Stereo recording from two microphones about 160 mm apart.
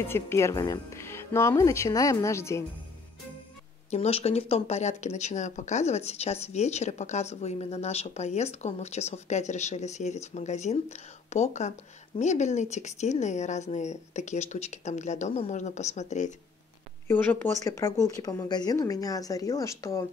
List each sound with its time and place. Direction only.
0.0 s speech: 15° left (ahead or behind)
3.9 s speech: 40° left (ahead or behind)
17.1 s speech: 10° left (ahead or behind)